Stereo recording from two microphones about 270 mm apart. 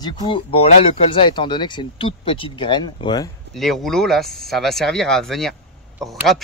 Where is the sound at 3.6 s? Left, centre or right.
Centre.